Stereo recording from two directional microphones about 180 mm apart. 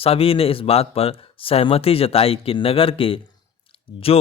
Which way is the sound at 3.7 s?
35° left (ahead or behind).